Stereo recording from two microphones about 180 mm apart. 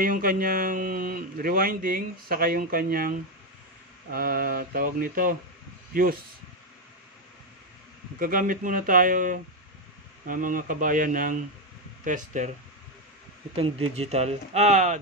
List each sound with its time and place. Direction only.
0.0 s speech: 50° right (ahead or behind)
8.2 s speech: 50° right (ahead or behind)
13.6 s speech: 35° right (ahead or behind)